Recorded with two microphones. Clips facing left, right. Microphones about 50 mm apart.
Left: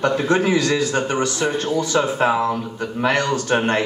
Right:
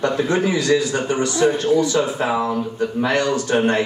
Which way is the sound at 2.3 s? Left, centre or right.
Left.